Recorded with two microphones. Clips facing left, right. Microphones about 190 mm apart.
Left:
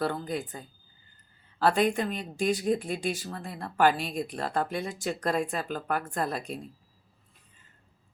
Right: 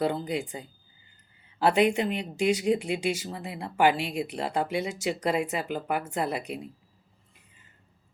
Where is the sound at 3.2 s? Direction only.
10° right (ahead or behind).